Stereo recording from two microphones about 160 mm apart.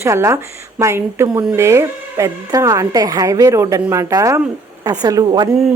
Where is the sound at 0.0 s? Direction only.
15° right (ahead or behind).